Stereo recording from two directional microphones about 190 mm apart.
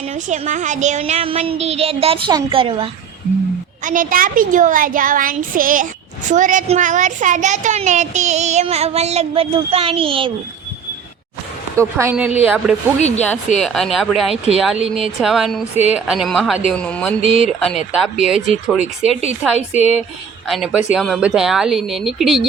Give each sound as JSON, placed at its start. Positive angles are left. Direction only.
{"t": 0.1, "sound": "speech", "side_deg": -40}
{"t": 3.8, "sound": "speech", "side_deg": -45}
{"t": 11.8, "sound": "a woman's voice", "side_deg": -15}
{"t": 13.0, "sound": "a woman's voice", "side_deg": 35}
{"t": 13.2, "sound": "speech", "side_deg": 5}
{"t": 19.5, "sound": "a woman's voice", "side_deg": 35}
{"t": 20.9, "sound": "speech", "side_deg": 0}